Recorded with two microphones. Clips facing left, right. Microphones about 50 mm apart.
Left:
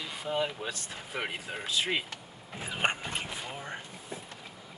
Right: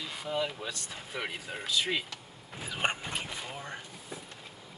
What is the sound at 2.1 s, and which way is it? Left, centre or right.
Vehicle, left.